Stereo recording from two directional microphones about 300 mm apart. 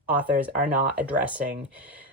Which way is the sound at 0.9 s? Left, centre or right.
Centre.